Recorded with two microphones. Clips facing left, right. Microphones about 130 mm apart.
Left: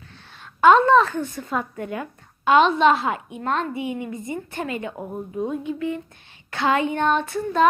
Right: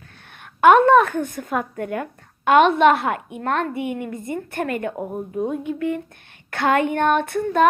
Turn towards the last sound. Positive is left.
turn(degrees=-55)  # may be behind; listen again after turning